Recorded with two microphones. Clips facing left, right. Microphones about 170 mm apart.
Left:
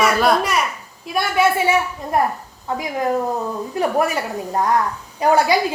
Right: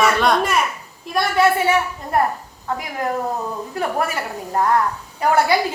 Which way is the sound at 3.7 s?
20° left (ahead or behind).